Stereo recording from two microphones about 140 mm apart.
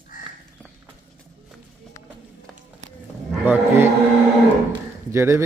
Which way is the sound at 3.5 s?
15° right (ahead or behind).